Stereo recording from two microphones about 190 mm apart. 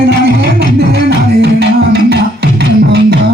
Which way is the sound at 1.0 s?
60° right (ahead or behind).